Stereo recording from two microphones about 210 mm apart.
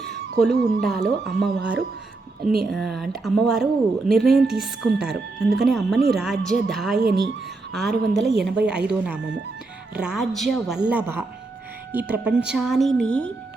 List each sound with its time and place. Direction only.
0.3 s a woman's voice: 50° right (ahead or behind)
0.8 s speech: centre (ahead or behind)
2.4 s a woman's voice: 50° right (ahead or behind)
2.6 s speech: centre (ahead or behind)
7.0 s a woman's voice: 50° right (ahead or behind)
7.7 s speech: centre (ahead or behind)